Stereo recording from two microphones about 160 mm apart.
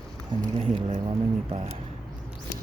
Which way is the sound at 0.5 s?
35° right (ahead or behind).